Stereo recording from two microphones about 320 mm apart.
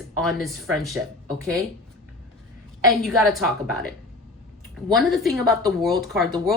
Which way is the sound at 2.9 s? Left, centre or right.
Centre.